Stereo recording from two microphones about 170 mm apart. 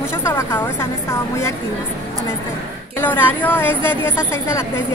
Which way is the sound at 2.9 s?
10° left (ahead or behind).